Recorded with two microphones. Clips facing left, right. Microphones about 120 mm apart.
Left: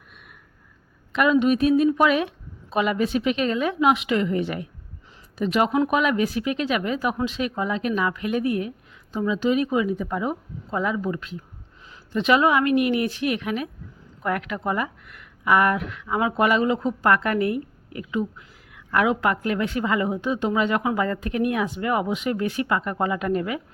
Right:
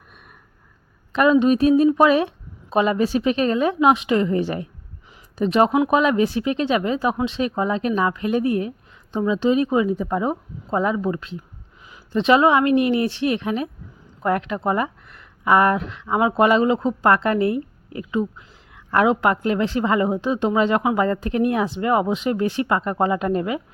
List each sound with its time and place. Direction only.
1.1 s a woman's voice: 35° right (ahead or behind)